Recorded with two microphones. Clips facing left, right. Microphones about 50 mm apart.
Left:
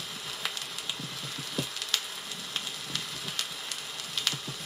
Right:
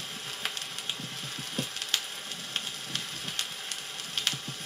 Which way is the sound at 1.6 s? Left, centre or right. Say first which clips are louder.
Left 1 dB; right.